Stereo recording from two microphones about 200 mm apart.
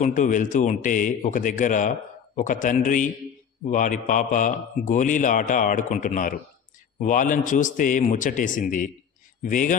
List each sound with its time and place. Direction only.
0.0 s a man's voice: 40° left (ahead or behind)